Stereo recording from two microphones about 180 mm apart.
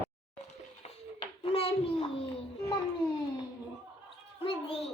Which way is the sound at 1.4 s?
30° left (ahead or behind).